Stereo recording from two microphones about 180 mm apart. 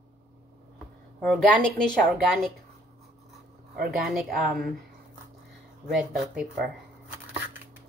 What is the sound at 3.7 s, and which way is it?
Speech, 60° right (ahead or behind).